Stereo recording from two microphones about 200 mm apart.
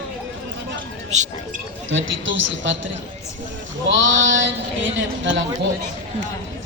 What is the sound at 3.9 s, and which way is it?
A man's voice, 70° right (ahead or behind).